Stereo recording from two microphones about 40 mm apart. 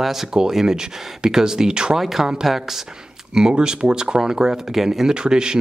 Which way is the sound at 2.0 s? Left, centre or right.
Centre.